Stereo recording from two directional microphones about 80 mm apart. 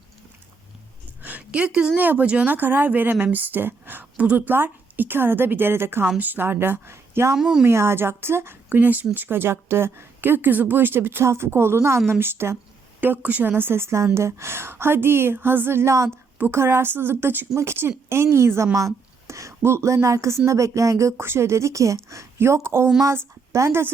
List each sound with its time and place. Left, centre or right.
1.2 s a sound: centre
2.0 s speech: right
7.3 s speech: centre
7.6 s a woman's voice: right